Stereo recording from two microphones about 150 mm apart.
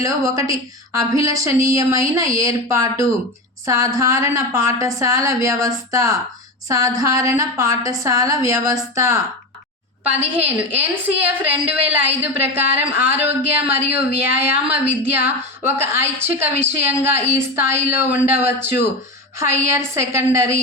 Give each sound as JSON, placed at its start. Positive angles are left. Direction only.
{"t": 0.0, "sound": "a woman's voice", "side_deg": -20}
{"t": 19.4, "sound": "a woman's voice", "side_deg": -15}